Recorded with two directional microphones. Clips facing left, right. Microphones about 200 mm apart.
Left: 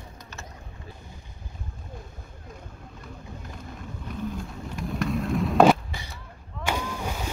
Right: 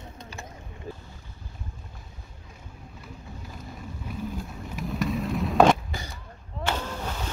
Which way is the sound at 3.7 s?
5° right (ahead or behind).